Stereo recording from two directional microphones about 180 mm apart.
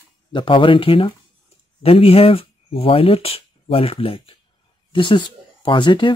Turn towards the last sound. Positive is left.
turn(degrees=25)  # may be behind; listen again after turning